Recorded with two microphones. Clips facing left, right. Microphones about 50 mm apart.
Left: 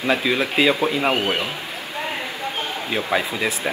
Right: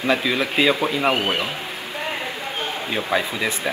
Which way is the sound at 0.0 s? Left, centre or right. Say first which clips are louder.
Even; centre.